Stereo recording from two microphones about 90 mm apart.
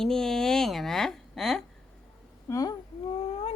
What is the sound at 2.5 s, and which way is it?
Speech, 40° left (ahead or behind).